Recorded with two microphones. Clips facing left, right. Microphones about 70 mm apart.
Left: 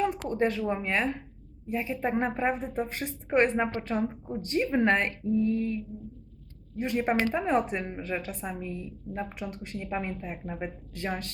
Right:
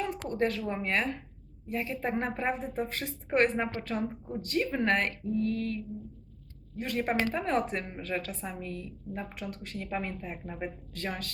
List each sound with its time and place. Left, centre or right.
0.3 s a woman's voice: centre
2.6 s a woman's voice: centre
5.3 s a woman's voice: centre